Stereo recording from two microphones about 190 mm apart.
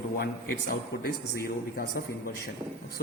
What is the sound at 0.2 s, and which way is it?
Speech, 55° left (ahead or behind).